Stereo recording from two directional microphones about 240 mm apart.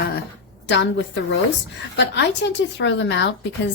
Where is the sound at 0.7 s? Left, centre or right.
Left.